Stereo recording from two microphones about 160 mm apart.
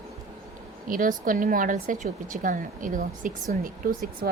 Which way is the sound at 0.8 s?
60° right (ahead or behind).